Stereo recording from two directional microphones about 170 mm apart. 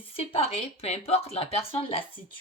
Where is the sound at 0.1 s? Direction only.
35° left (ahead or behind).